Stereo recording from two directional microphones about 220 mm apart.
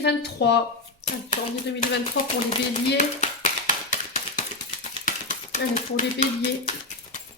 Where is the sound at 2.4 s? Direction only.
30° left (ahead or behind).